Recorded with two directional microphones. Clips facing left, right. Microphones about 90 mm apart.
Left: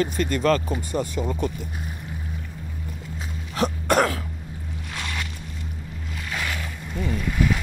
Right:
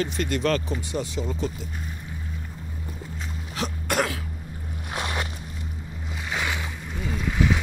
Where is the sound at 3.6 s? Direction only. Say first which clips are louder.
Left 6 dB; 45° left (ahead or behind).